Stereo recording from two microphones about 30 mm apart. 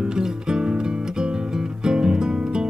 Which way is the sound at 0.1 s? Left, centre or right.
Right.